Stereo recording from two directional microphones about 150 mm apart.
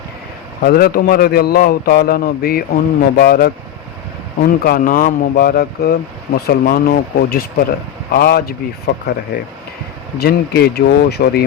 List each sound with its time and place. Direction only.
0.6 s a man's voice: 90° left
10.2 s a man's voice: 90° left